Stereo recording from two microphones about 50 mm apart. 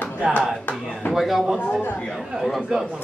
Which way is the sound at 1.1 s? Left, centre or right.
Centre.